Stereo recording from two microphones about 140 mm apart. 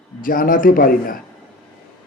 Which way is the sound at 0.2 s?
80° left.